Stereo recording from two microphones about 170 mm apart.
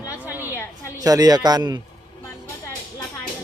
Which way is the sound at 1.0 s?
20° right (ahead or behind).